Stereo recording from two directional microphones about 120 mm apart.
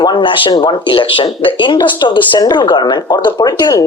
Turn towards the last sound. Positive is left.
turn(degrees=30)  # may be behind; listen again after turning